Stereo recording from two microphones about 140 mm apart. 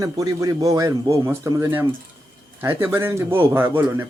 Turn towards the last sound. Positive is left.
turn(degrees=-15)  # may be behind; listen again after turning